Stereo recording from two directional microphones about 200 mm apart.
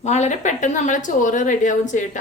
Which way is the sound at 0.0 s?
35° left (ahead or behind).